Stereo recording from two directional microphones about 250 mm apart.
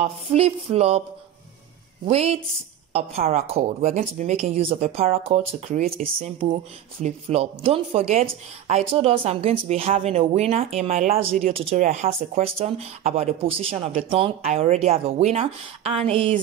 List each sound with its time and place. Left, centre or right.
0.0 s speech: right
2.0 s speech: right